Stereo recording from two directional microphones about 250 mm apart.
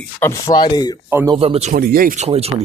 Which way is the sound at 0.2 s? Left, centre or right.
Centre.